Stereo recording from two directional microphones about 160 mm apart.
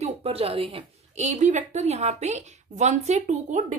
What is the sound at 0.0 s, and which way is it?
A woman's voice, 40° right (ahead or behind).